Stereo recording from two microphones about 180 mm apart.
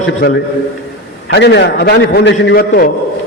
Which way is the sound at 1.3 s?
70° left (ahead or behind).